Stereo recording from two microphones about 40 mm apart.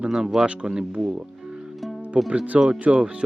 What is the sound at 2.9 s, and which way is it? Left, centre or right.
Speech, right.